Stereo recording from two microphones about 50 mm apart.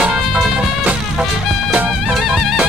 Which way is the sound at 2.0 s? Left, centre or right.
Centre.